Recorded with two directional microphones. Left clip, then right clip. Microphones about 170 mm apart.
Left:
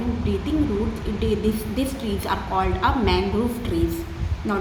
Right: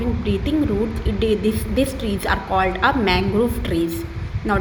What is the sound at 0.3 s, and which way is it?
A woman's voice, 35° right (ahead or behind).